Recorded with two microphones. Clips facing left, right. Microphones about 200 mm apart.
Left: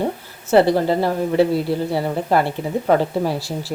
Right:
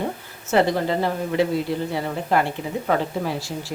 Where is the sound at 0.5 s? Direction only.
35° left (ahead or behind).